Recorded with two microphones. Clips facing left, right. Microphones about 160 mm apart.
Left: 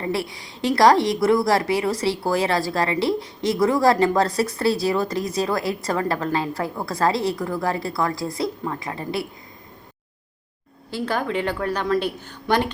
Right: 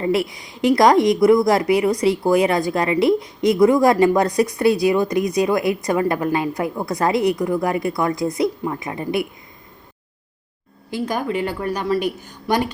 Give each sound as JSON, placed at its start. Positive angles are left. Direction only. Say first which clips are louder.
{"t": 0.0, "sound": "a woman's voice", "louder": "right 6 dB", "side_deg": -20}
{"t": 10.9, "sound": "a woman's voice", "louder": "right 2 dB", "side_deg": -10}